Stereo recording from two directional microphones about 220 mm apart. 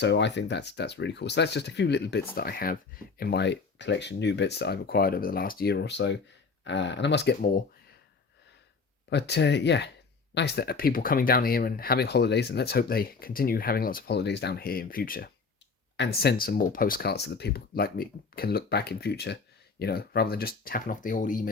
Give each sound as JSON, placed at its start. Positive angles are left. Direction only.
{"t": 0.0, "sound": "speech", "side_deg": 55}
{"t": 9.0, "sound": "speech", "side_deg": 50}